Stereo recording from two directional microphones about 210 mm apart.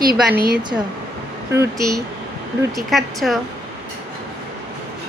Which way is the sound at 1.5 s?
15° right (ahead or behind).